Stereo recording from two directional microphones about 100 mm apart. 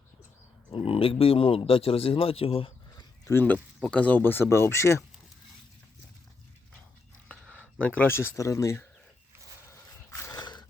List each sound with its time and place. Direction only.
0.7 s speech: 65° left (ahead or behind)
3.8 s speech: 15° left (ahead or behind)
7.3 s speech: 10° left (ahead or behind); by 8.9 s 30° left (ahead or behind)
9.6 s horse: 30° left (ahead or behind)
10.4 s mechanisms: 45° left (ahead or behind)